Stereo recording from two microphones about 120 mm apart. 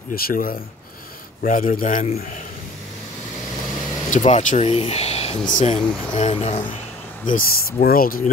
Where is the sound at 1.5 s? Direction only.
90° left.